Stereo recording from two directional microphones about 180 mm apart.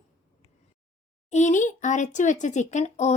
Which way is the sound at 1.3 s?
45° left (ahead or behind).